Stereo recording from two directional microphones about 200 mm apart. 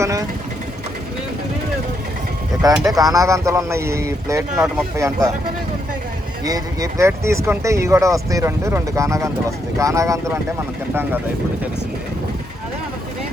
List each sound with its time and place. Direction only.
0.0 s speech: 15° right (ahead or behind)
2.8 s speech: 15° right (ahead or behind)
6.4 s speech: 20° right (ahead or behind)